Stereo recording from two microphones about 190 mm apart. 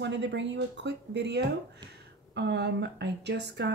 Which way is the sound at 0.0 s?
65° right (ahead or behind).